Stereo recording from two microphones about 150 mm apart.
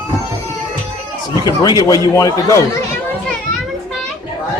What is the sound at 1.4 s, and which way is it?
A man's voice, 25° left (ahead or behind).